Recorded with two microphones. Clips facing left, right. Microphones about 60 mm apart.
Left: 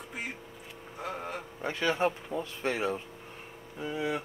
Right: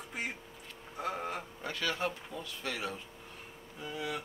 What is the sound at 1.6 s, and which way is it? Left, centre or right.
A man's voice, left.